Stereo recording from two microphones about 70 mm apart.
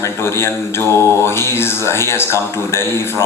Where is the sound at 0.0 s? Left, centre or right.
Left.